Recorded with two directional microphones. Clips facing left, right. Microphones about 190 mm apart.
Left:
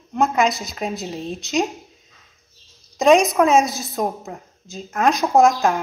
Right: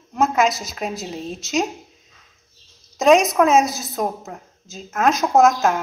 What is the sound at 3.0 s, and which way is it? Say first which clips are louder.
A child's voice: even; centre (ahead or behind).